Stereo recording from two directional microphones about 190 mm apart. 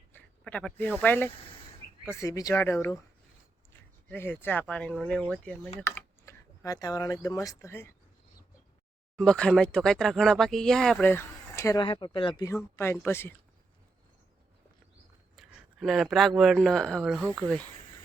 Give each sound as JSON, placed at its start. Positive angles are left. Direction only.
{"t": 0.1, "sound": "speech", "side_deg": 5}
{"t": 4.1, "sound": "speech", "side_deg": 10}
{"t": 9.1, "sound": "speech", "side_deg": 5}
{"t": 15.4, "sound": "speech", "side_deg": 0}